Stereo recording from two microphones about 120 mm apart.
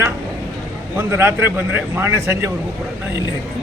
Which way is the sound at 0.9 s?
20° right (ahead or behind).